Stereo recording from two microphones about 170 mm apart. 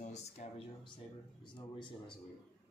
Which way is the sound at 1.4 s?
30° left (ahead or behind).